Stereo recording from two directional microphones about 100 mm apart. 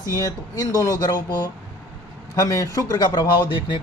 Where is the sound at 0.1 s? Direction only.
40° left (ahead or behind).